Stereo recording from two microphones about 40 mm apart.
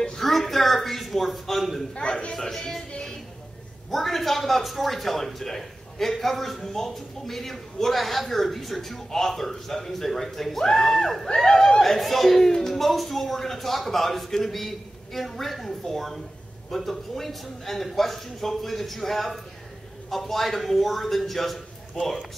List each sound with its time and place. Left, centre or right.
0.2 s speech: centre
2.0 s a man's voice: left
2.3 s speech: centre
3.9 s a man's voice: centre
11.8 s a man's voice: centre